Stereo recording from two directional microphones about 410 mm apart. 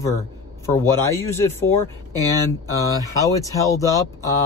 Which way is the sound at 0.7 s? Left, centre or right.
Centre.